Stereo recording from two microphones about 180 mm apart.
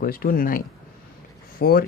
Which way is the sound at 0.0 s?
55° left (ahead or behind).